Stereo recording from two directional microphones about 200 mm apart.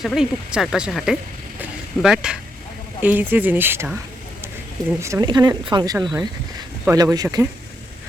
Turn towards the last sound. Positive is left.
turn(degrees=-20)  # may be behind; listen again after turning